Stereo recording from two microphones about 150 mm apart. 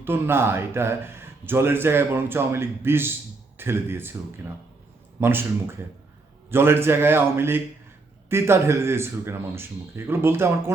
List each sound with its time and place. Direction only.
0.0 s speech: 15° right (ahead or behind)
5.2 s speech: 15° right (ahead or behind)